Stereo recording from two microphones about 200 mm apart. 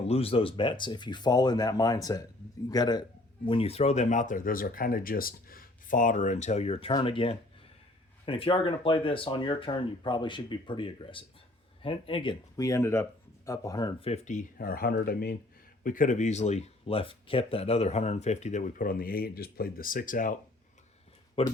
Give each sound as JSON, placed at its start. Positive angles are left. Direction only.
{"t": 0.1, "sound": "a man's voice", "side_deg": 30}
{"t": 21.4, "sound": "speech", "side_deg": 30}